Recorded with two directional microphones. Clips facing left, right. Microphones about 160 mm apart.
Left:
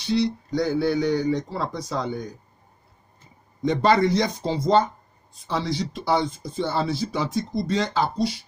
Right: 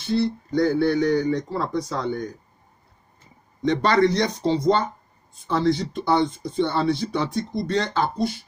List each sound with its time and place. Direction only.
0.0 s a sound: 80° left
0.5 s a man's voice: 5° left (ahead or behind)
3.6 s a man's voice: 5° left (ahead or behind)
5.6 s a man's voice: centre (ahead or behind)
8.2 s speech: 90° left